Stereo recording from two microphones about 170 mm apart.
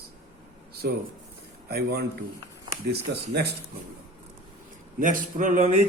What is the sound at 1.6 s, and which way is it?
A man's voice, 70° right (ahead or behind).